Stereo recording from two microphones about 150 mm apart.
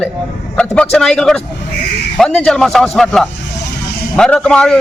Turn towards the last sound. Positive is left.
turn(degrees=5)  # may be behind; listen again after turning